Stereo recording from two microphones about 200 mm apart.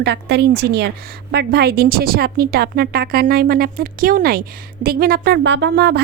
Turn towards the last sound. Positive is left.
turn(degrees=-55)  # may be behind; listen again after turning